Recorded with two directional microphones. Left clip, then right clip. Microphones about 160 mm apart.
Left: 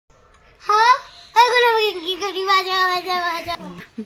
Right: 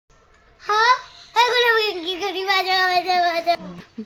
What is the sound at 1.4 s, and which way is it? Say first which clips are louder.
Child singing: left 2 dB; 15° right (ahead or behind).